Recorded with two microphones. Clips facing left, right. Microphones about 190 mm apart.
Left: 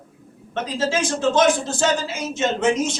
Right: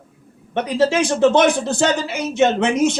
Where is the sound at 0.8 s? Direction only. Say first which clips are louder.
Right 7 dB; 60° right (ahead or behind).